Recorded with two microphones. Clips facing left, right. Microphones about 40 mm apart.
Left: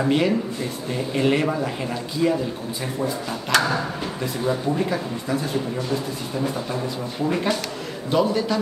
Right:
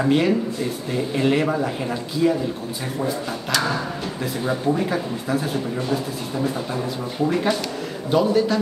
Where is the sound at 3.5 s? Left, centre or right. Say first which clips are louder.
Left 3 dB; left.